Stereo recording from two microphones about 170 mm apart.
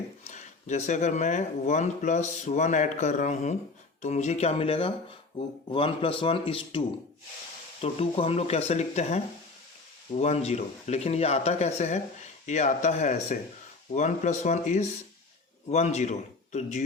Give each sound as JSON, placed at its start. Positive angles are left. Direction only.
{"t": 0.3, "sound": "speech", "side_deg": 45}